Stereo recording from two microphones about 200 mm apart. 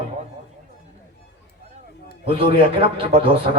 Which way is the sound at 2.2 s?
25° right (ahead or behind).